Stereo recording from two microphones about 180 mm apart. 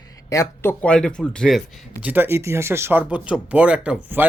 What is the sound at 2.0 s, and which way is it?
Speech, 10° right (ahead or behind).